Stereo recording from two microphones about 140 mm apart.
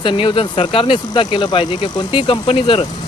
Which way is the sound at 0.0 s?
35° left (ahead or behind).